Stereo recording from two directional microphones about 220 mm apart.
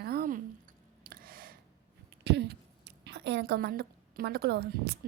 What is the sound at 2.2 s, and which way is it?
A woman's voice, 50° right (ahead or behind).